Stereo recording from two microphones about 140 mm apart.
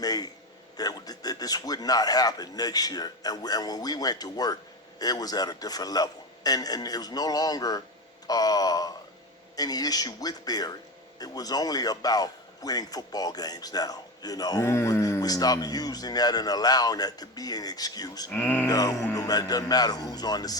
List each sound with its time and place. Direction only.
0.0 s a man's voice: 30° left (ahead or behind)
18.3 s speech: 15° left (ahead or behind)
18.7 s a man's voice: 25° left (ahead or behind)